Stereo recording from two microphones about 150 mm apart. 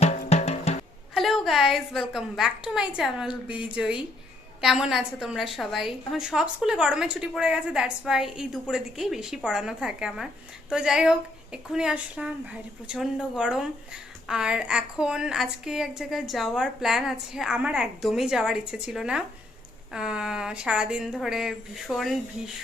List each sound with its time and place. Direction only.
0.3 s music: 45° left (ahead or behind)
1.1 s a woman's voice: centre (ahead or behind)